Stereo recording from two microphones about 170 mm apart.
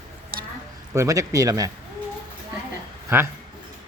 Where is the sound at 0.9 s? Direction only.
20° right (ahead or behind).